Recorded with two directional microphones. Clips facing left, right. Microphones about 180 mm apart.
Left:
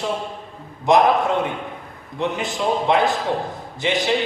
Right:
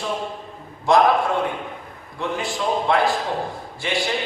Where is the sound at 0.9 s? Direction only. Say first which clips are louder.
Left 1 dB; 20° left (ahead or behind).